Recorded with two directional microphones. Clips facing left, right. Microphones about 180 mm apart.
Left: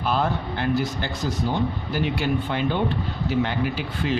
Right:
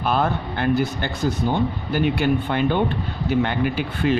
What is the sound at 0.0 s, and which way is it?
Speech, 60° right (ahead or behind).